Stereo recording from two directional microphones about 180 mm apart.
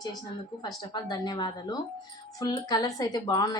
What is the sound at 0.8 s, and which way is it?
A woman's voice, 25° left (ahead or behind).